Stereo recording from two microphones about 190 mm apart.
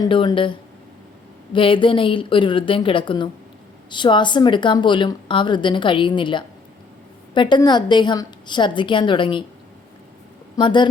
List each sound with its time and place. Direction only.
0.0 s speech: 25° left (ahead or behind)
10.6 s speech: 25° left (ahead or behind)